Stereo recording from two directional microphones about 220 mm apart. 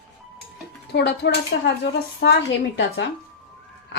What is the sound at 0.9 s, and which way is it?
Cutlery, 50° left (ahead or behind).